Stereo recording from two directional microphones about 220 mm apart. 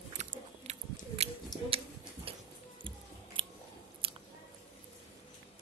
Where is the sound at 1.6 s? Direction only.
25° right (ahead or behind).